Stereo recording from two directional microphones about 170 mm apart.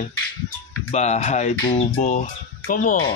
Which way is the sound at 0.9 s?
40° left (ahead or behind).